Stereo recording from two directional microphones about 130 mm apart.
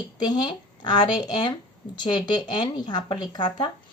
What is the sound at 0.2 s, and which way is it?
A woman's voice, 35° left (ahead or behind).